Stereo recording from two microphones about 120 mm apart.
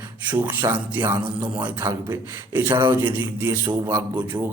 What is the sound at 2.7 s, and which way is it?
Speech, 40° right (ahead or behind).